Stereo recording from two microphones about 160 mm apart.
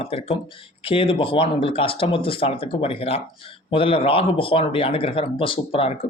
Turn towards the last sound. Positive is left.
turn(degrees=35)  # may be behind; listen again after turning